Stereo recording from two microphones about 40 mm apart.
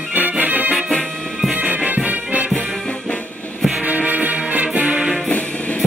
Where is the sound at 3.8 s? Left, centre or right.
Right.